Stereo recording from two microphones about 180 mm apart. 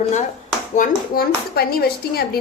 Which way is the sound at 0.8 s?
55° left (ahead or behind).